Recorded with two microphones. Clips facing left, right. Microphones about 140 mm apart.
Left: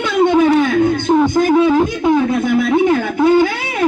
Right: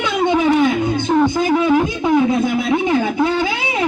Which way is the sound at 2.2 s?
20° right (ahead or behind).